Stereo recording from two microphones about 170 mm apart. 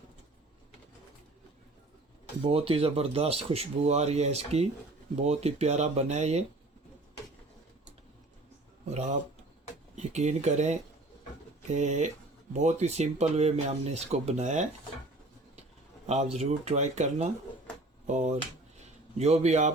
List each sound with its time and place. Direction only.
2.4 s speech: 35° right (ahead or behind)
8.9 s speech: 40° right (ahead or behind)
16.0 s speech: 40° right (ahead or behind)